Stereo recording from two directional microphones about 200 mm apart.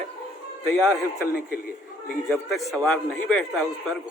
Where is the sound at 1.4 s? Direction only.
50° left (ahead or behind).